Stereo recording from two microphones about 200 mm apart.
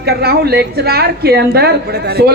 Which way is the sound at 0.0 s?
55° right (ahead or behind).